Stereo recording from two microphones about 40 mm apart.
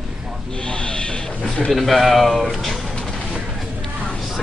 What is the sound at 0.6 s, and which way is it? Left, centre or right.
Music, left.